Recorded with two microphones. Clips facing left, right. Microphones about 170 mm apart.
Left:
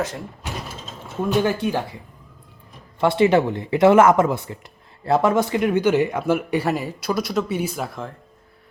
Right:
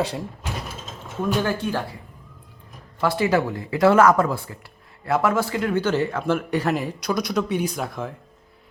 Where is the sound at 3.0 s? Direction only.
25° left (ahead or behind).